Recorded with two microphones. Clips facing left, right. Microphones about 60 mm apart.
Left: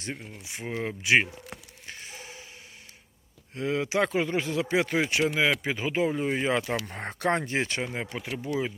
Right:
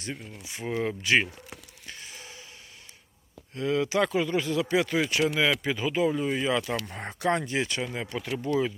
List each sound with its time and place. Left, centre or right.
0.0 s speech: left
1.9 s a sound: left
3.5 s speech: left